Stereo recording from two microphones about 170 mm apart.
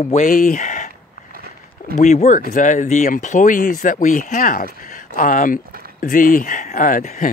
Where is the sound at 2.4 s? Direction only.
55° left (ahead or behind).